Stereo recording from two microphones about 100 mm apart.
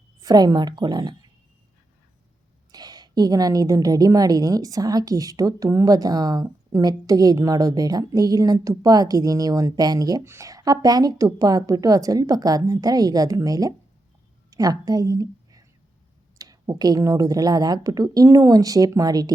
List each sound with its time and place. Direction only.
0.2 s a woman's voice: 40° right (ahead or behind)
2.7 s a woman's voice: 40° right (ahead or behind)